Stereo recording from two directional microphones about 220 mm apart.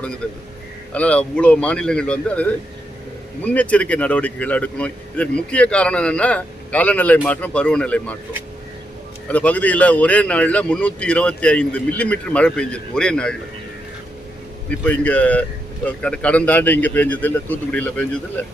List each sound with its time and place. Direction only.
0.9 s a man's voice: 5° left (ahead or behind)
9.2 s a man's voice: 5° left (ahead or behind)
14.7 s a man's voice: 5° left (ahead or behind)